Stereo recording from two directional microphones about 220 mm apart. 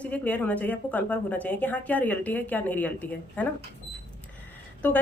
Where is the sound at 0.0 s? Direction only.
5° left (ahead or behind).